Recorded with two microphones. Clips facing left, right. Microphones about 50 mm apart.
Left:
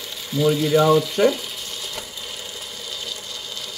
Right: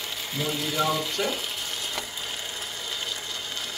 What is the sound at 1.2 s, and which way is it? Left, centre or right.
Stir, left.